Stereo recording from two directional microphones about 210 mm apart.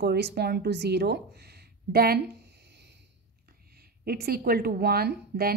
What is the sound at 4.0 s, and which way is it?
A woman's voice, 45° right (ahead or behind).